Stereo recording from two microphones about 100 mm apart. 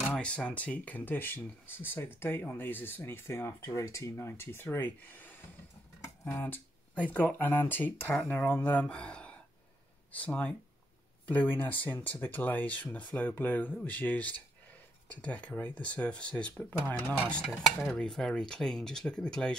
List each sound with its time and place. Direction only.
0.1 s speech: 10° left (ahead or behind)